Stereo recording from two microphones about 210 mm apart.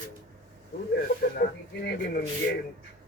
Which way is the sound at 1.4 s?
50° left (ahead or behind).